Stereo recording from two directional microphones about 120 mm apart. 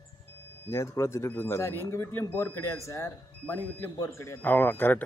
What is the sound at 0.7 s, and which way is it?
Speech, 25° left (ahead or behind).